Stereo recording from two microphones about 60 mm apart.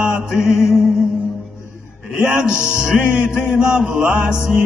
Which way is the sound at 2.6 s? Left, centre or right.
Left.